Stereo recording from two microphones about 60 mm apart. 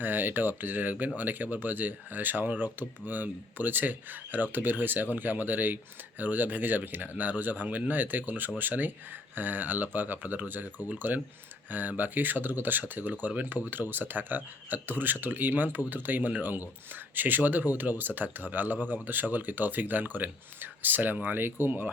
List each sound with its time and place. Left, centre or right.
0.0 s speech: right